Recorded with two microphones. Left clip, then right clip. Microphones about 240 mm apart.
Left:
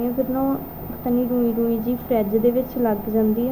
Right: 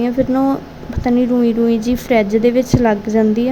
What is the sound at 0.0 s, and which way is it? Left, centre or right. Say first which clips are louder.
A woman's voice: right 7 dB; right.